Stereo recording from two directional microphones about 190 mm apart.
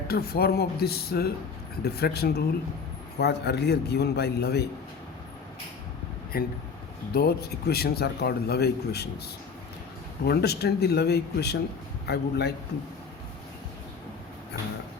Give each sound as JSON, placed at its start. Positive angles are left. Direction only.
{"t": 0.1, "sound": "a man's voice", "side_deg": 55}
{"t": 6.3, "sound": "a man's voice", "side_deg": 50}
{"t": 10.2, "sound": "a man's voice", "side_deg": 60}